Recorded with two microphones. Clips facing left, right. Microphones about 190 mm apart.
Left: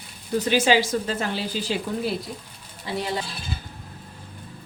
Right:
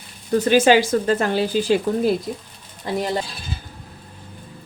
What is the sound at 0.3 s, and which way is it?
Speech, 50° right (ahead or behind).